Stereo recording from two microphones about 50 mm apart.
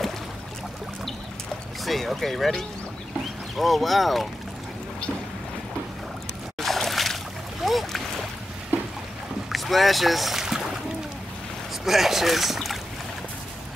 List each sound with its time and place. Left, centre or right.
1.9 s speech: centre
6.6 s boat: centre
7.6 s splash: centre
9.5 s speech: centre
11.8 s speech: centre